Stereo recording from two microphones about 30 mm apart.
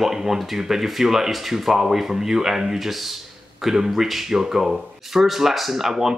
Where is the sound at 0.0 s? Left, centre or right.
Centre.